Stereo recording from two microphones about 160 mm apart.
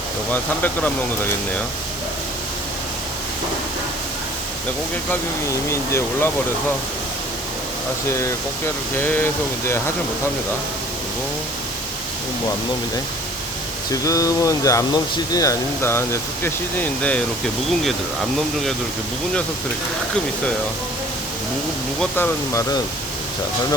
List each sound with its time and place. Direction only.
0.3 s speech: 10° left (ahead or behind)
5.9 s speech: 15° left (ahead or behind)
8.1 s speech: 15° left (ahead or behind)
13.9 s speech: 20° left (ahead or behind)
22.1 s speech: 10° left (ahead or behind)